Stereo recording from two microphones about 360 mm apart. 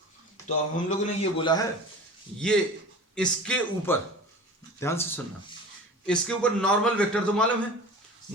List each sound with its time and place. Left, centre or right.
0.4 s a man's voice: centre
3.2 s a man's voice: centre